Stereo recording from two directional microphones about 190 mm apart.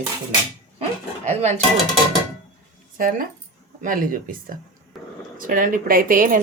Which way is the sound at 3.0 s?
50° right (ahead or behind).